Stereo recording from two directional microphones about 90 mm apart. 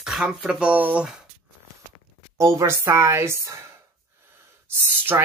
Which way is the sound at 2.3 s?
35° right (ahead or behind).